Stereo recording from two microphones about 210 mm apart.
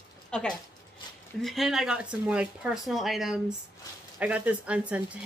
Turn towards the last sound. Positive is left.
turn(degrees=-5)  # may be behind; listen again after turning